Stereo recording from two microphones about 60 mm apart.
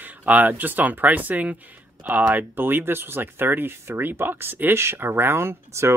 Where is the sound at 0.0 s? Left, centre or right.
Right.